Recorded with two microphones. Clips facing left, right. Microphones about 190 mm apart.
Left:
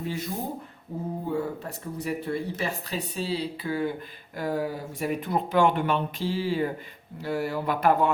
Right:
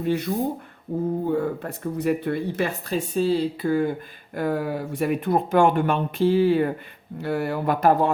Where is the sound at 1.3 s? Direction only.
60° right (ahead or behind).